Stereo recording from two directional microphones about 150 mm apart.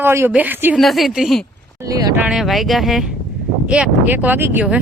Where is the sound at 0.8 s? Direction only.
Centre (ahead or behind).